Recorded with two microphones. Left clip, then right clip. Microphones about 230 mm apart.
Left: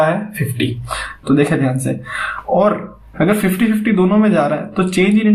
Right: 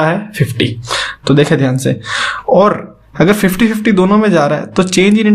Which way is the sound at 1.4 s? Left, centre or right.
Right.